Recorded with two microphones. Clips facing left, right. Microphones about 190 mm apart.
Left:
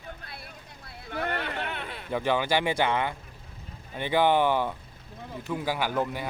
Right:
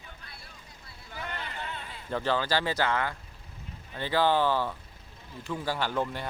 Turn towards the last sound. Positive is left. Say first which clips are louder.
# left 2 dB
turn(degrees=10)  # may be behind; listen again after turning